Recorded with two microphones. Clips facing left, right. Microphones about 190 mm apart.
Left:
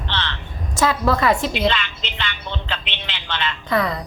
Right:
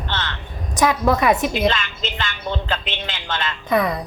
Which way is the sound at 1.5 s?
45° right (ahead or behind).